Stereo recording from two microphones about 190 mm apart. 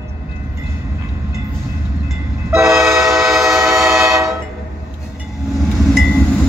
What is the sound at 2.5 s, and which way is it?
Train, 15° right (ahead or behind).